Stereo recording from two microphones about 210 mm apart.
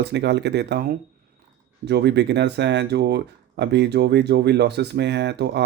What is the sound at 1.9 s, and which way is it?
Speech, 50° right (ahead or behind).